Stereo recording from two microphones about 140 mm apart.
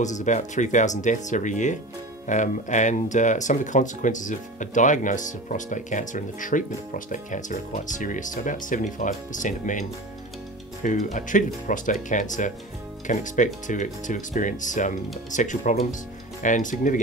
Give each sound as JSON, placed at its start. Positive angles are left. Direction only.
{"t": 0.0, "sound": "speech", "side_deg": 60}